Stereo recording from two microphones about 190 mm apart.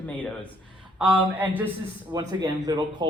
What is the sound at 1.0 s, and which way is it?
Speech, 10° right (ahead or behind).